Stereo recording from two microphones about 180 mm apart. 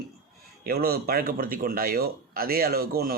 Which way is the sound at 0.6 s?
55° right (ahead or behind).